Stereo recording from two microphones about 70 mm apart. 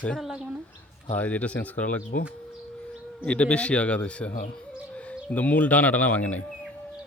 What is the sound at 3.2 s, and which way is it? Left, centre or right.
A man's voice, centre.